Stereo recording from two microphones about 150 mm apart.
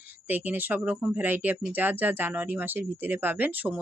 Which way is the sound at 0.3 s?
10° right (ahead or behind).